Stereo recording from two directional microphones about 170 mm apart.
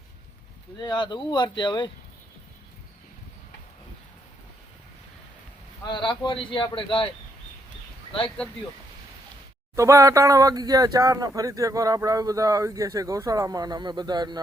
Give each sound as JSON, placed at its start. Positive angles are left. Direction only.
{"t": 0.9, "sound": "a man's voice", "side_deg": 25}
{"t": 5.8, "sound": "a man's voice", "side_deg": 25}
{"t": 9.7, "sound": "speech", "side_deg": -20}